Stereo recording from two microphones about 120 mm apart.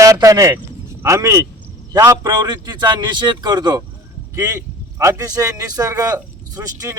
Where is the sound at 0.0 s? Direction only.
30° right (ahead or behind).